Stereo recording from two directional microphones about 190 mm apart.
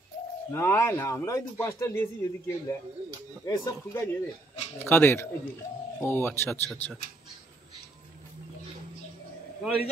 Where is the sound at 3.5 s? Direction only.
15° left (ahead or behind).